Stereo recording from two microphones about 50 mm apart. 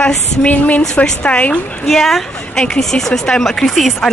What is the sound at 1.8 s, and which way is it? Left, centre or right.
A woman's voice, centre.